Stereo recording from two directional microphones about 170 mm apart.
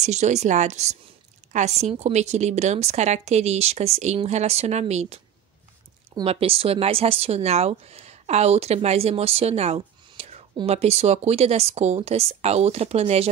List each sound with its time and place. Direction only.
0.0 s speech: 40° right (ahead or behind)
6.2 s speech: 35° right (ahead or behind)